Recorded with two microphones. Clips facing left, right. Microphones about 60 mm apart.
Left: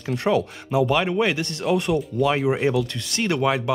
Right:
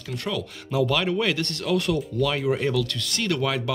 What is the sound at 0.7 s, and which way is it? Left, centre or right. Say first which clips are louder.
Speech: left 3 dB; centre.